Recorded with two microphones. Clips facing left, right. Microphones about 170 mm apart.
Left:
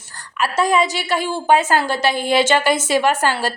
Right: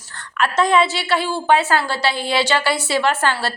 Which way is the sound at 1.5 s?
45° left (ahead or behind).